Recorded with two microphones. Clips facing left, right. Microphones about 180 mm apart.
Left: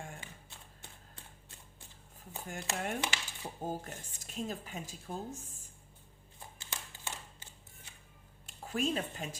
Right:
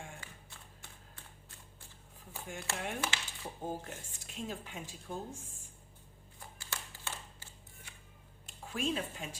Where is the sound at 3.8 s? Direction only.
40° left (ahead or behind).